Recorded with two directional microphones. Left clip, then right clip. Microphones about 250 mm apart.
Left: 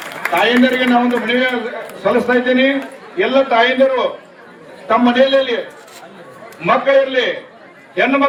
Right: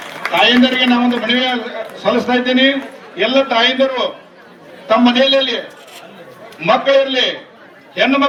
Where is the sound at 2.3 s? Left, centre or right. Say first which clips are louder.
Even; right.